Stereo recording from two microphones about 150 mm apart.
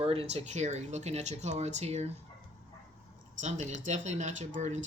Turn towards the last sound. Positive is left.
turn(degrees=-50)  # may be behind; listen again after turning